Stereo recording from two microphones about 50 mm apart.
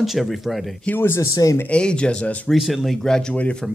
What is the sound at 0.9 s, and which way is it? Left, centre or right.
Speech, left.